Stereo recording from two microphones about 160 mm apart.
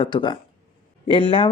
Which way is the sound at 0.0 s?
30° left (ahead or behind).